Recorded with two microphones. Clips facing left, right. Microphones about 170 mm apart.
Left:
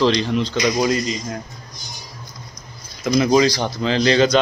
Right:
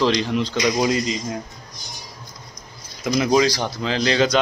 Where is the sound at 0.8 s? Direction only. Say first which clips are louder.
Left 1 dB; 20° right (ahead or behind).